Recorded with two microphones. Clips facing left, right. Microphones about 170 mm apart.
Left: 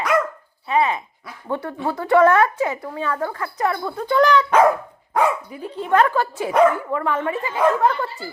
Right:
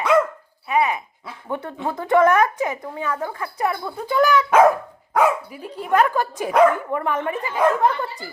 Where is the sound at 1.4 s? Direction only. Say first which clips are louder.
Left 2 dB; 20° right (ahead or behind).